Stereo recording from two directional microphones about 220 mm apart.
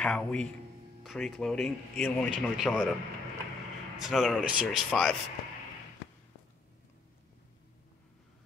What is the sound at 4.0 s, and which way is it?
A man's voice, centre (ahead or behind).